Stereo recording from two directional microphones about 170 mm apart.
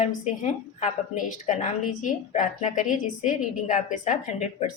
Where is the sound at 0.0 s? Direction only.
45° left (ahead or behind).